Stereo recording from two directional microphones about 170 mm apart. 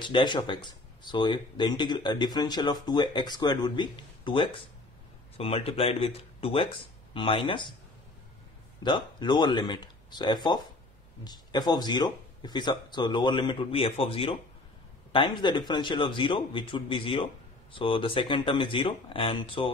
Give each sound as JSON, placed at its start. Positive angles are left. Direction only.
{"t": 0.0, "sound": "speech", "side_deg": 25}
{"t": 8.8, "sound": "speech", "side_deg": 25}